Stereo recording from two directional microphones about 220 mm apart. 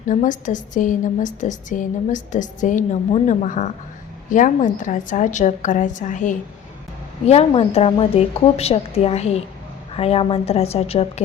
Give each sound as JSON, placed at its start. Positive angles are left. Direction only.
{"t": 0.1, "sound": "a woman's voice", "side_deg": 35}